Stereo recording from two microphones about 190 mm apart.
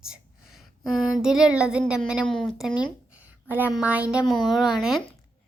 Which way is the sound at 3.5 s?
5° right (ahead or behind).